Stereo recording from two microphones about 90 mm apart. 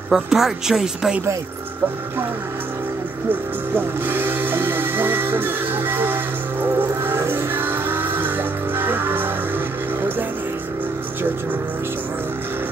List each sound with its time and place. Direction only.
0.1 s speech: 5° right (ahead or behind)
3.3 s music: 25° right (ahead or behind)